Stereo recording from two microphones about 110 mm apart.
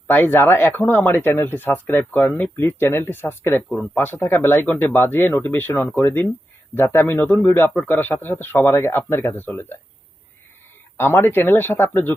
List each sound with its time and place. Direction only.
0.1 s speech: 20° left (ahead or behind)
10.9 s speech: 20° left (ahead or behind)